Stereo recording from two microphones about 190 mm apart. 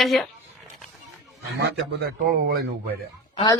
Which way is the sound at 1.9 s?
55° right (ahead or behind).